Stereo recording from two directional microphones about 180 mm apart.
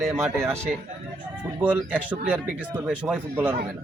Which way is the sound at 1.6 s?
10° right (ahead or behind).